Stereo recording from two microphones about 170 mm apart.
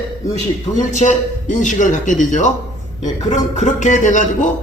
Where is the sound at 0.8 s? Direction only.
45° left (ahead or behind).